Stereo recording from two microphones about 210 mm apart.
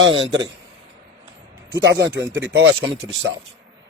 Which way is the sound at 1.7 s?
55° right (ahead or behind).